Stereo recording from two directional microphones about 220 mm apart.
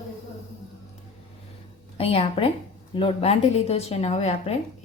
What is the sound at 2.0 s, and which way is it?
A woman's voice, 25° left (ahead or behind).